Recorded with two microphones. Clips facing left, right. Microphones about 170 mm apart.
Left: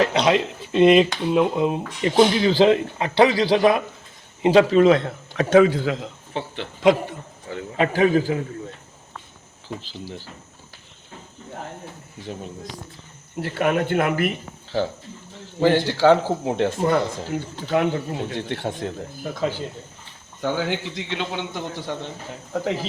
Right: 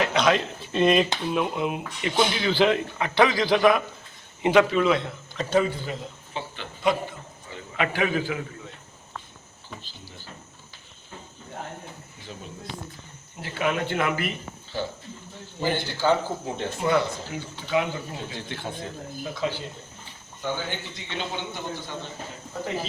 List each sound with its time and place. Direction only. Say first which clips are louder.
0.0 s speech: left 3 dB; 30° left (ahead or behind)
5.4 s a man's voice: left 8 dB; 80° left
7.8 s speech: left 7 dB; 35° left (ahead or behind)
13.4 s speech: left 5 dB; 60° left (ahead or behind)
15.6 s speech: left 8 dB; 80° left
16.8 s speech: left 3 dB; 50° left (ahead or behind)
19.2 s speech: left 3 dB; 45° left (ahead or behind)
20.4 s a man's voice: left 6 dB; 90° left